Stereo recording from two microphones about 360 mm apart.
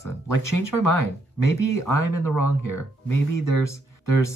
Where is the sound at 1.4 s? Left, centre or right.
Left.